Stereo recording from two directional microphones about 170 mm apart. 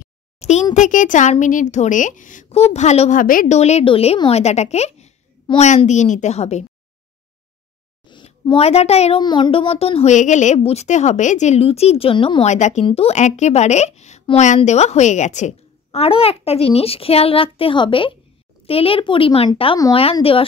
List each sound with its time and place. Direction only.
0.4 s a sound: 40° left (ahead or behind)
0.7 s a woman's voice: 50° left (ahead or behind)
8.1 s a child's voice: 30° left (ahead or behind)
9.2 s a woman's voice: 25° left (ahead or behind)